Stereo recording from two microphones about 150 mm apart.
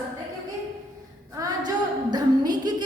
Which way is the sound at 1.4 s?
25° right (ahead or behind).